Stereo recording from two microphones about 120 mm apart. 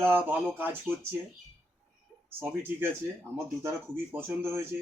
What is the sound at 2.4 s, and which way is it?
A man's voice, 20° right (ahead or behind).